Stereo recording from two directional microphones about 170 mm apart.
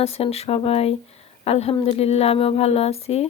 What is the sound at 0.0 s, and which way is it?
A woman's voice, 35° left (ahead or behind).